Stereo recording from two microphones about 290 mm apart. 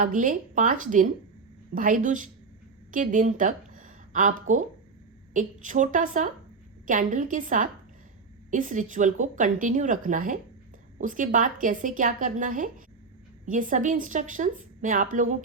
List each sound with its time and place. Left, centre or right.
0.0 s a woman's voice: right